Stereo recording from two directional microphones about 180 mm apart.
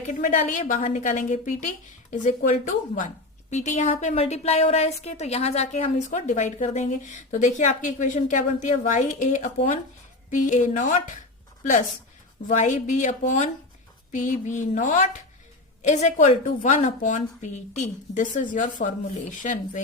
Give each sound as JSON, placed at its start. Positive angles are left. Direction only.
{"t": 0.1, "sound": "a woman's voice", "side_deg": 40}
{"t": 12.5, "sound": "a woman's voice", "side_deg": 40}